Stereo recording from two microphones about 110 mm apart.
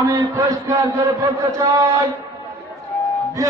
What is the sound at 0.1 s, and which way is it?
Speech, 30° right (ahead or behind).